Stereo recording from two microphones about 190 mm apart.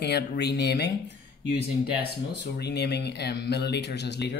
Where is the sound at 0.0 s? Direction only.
60° left (ahead or behind).